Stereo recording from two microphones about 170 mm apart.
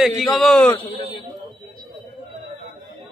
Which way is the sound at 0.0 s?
Centre (ahead or behind).